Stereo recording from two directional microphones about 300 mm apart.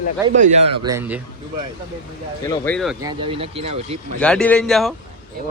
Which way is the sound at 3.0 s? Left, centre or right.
Centre.